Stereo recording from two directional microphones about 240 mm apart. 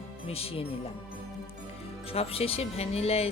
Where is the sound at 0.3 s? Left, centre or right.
Left.